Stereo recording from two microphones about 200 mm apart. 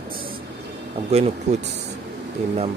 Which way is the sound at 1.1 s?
35° right (ahead or behind).